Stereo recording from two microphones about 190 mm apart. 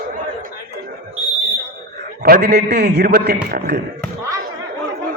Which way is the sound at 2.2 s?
55° right (ahead or behind).